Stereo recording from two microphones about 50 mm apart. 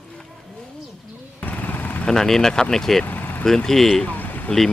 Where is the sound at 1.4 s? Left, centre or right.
Left.